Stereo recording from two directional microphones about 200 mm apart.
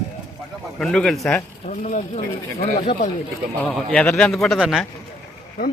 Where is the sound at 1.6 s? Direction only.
35° left (ahead or behind).